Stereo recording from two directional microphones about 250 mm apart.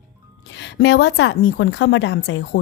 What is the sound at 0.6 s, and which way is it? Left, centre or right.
A woman's voice, left.